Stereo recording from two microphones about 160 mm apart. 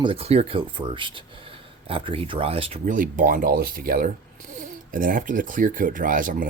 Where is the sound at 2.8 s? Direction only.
55° right (ahead or behind).